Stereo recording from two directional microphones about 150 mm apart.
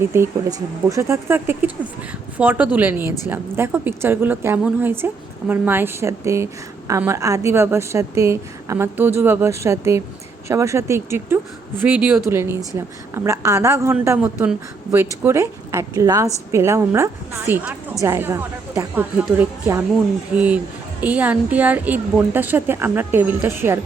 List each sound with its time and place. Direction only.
0.0 s a woman's voice: 15° right (ahead or behind)